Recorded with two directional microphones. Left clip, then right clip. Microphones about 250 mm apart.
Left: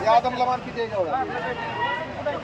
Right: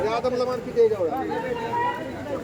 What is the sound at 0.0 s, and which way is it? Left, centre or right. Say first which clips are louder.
Speech: left 6 dB; centre.